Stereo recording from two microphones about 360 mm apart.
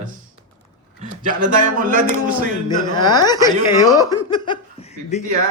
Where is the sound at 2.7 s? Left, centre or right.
Centre.